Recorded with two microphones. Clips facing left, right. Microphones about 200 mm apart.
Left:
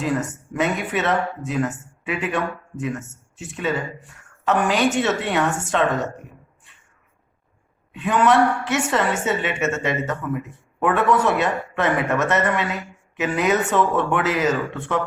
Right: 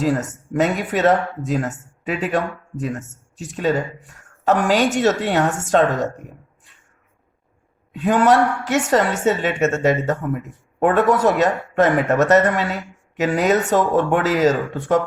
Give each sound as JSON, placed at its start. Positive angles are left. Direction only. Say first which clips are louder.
{"t": 0.0, "sound": "a woman's voice", "louder": "right 3 dB", "side_deg": -40}
{"t": 7.9, "sound": "a woman's voice", "louder": "right 2 dB", "side_deg": -40}